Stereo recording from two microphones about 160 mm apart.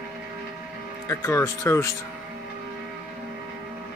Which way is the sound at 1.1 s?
15° left (ahead or behind).